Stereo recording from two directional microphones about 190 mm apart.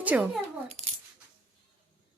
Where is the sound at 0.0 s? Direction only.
10° right (ahead or behind).